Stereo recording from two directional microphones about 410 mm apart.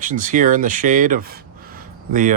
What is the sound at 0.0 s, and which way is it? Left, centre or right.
Speech, centre.